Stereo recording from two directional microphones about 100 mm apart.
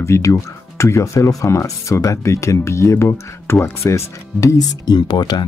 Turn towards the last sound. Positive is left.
turn(degrees=45)  # may be behind; listen again after turning